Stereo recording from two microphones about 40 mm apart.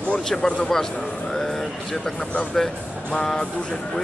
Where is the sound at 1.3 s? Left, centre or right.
Centre.